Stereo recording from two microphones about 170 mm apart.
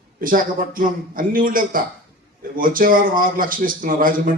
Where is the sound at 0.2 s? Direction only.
55° right (ahead or behind).